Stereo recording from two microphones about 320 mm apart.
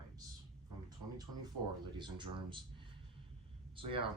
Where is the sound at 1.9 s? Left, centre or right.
Centre.